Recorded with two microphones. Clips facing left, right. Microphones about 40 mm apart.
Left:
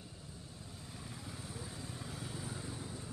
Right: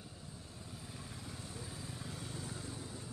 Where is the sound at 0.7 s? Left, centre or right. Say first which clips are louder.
Even; centre.